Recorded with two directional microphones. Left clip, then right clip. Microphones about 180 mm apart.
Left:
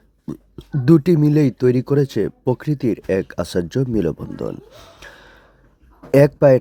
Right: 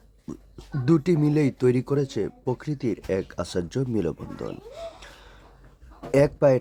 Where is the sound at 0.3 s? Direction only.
45° left (ahead or behind).